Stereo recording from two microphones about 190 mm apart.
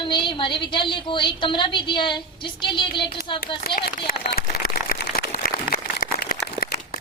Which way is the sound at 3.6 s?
50° left (ahead or behind).